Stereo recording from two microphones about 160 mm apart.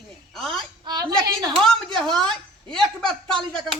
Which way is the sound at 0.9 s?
25° right (ahead or behind).